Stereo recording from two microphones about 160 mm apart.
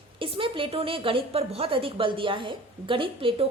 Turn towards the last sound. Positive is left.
turn(degrees=-35)  # may be behind; listen again after turning